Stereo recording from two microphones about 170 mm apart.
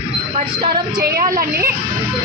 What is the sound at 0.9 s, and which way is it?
Speech, 60° right (ahead or behind).